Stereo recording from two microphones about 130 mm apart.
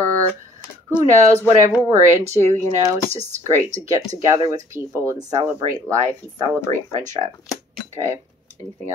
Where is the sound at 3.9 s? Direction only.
25° right (ahead or behind).